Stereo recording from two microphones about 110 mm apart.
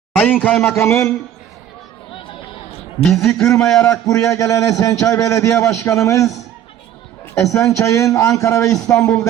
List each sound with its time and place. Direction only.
0.2 s a man's voice: 15° left (ahead or behind)
3.1 s a man's voice: 5° left (ahead or behind)
4.0 s a man's voice: 30° left (ahead or behind)
7.3 s a man's voice: 25° left (ahead or behind)